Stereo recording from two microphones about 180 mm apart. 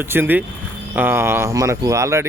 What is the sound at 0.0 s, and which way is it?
Speech, 10° right (ahead or behind).